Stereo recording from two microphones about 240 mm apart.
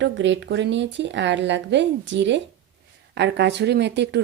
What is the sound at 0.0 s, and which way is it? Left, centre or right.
Speech, right.